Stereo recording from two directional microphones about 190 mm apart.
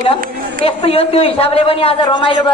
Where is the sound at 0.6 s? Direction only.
30° left (ahead or behind).